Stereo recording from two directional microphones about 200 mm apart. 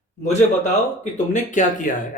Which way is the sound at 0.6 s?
35° left (ahead or behind).